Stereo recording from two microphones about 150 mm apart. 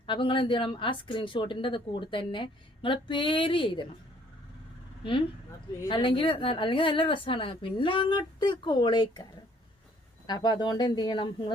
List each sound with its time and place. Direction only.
0.0 s a woman's voice: 35° left (ahead or behind)
5.9 s a woman's voice: 35° left (ahead or behind)
10.2 s speech: 25° left (ahead or behind)